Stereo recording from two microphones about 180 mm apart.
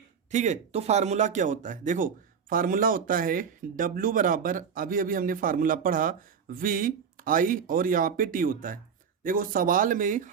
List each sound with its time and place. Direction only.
0.3 s speech: 40° right (ahead or behind)